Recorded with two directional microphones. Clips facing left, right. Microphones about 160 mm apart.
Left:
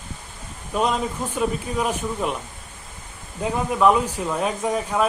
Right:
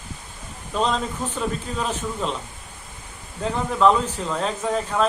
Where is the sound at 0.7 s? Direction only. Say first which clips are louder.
Left 1 dB; 10° left (ahead or behind).